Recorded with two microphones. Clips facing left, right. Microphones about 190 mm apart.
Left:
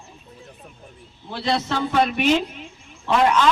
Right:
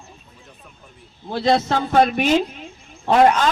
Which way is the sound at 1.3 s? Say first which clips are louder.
Right 5 dB; 45° right (ahead or behind).